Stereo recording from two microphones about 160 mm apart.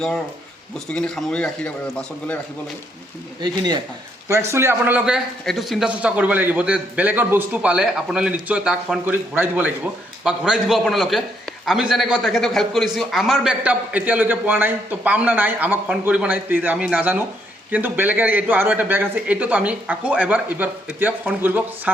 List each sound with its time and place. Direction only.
0.9 s a man's voice: 5° left (ahead or behind)
3.4 s speech: 25° right (ahead or behind)
4.3 s a man's voice: 15° right (ahead or behind)